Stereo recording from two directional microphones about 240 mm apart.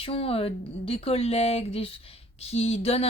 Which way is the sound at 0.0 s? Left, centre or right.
Left.